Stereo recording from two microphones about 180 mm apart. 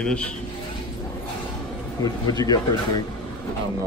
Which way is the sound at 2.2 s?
20° left (ahead or behind).